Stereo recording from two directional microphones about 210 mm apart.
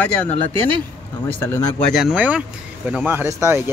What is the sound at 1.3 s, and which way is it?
Speech, 10° left (ahead or behind).